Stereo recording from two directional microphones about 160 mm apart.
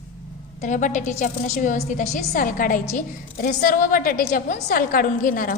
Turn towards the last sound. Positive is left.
turn(degrees=60)  # may be behind; listen again after turning